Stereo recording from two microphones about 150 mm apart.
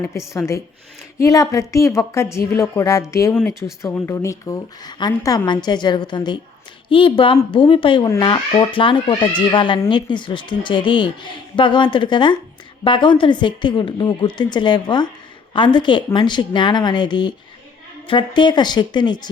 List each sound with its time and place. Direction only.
0.0 s a woman's voice: 20° left (ahead or behind)